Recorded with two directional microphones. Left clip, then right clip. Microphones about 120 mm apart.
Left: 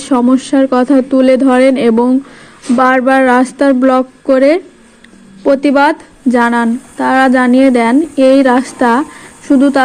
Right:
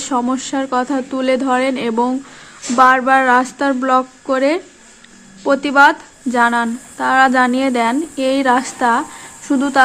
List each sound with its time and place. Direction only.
0.0 s a woman's voice: 20° left (ahead or behind)